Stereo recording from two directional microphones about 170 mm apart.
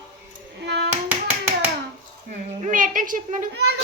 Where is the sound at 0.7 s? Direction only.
75° right (ahead or behind).